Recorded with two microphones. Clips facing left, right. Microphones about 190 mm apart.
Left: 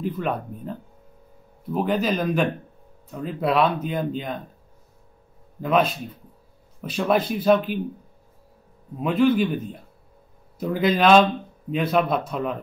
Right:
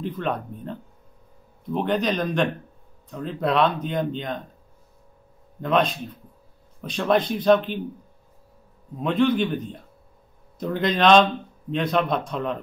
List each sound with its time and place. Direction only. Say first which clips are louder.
0.0 s speech: left 1 dB; 5° left (ahead or behind)
5.6 s speech: left 1 dB; 5° left (ahead or behind)
8.9 s speech: left 2 dB; 5° left (ahead or behind)